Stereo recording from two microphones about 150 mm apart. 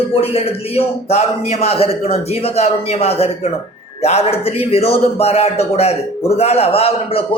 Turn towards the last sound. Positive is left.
turn(degrees=40)  # may be behind; listen again after turning